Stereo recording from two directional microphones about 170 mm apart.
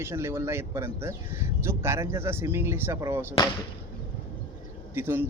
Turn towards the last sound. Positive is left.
turn(degrees=-15)  # may be behind; listen again after turning